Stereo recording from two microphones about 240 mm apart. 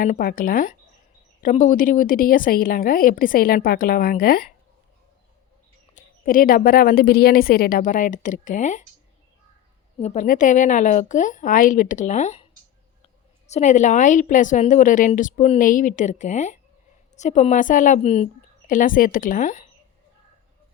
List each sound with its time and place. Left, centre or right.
0.0 s a woman's voice: left
5.9 s a woman's voice: left
10.0 s a woman's voice: left
13.5 s a woman's voice: left